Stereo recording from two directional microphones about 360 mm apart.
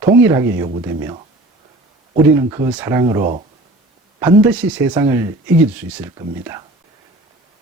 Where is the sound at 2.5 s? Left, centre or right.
Centre.